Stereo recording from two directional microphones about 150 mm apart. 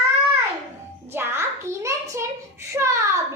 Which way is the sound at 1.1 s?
20° right (ahead or behind).